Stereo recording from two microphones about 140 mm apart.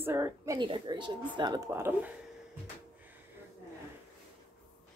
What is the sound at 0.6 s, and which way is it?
Speech, 35° right (ahead or behind).